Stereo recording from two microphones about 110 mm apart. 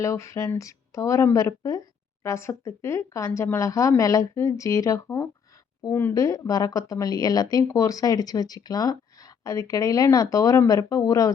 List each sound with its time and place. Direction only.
0.0 s a woman's voice: 30° left (ahead or behind)
6.1 s speech: 30° left (ahead or behind)